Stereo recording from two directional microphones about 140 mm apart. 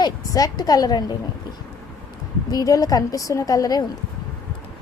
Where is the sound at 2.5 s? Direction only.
30° left (ahead or behind).